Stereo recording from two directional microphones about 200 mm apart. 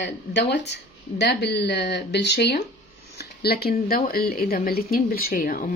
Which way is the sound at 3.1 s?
50° left (ahead or behind).